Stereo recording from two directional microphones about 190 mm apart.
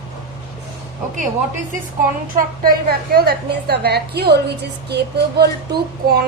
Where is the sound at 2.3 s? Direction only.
50° right (ahead or behind).